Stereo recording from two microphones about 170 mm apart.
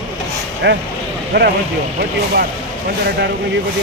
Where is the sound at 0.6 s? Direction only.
85° right.